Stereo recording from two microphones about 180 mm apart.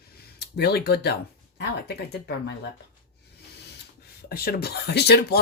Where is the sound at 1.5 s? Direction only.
65° left (ahead or behind).